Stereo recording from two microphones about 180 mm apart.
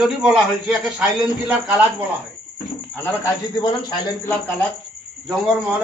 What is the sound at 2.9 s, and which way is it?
Speech, 15° left (ahead or behind).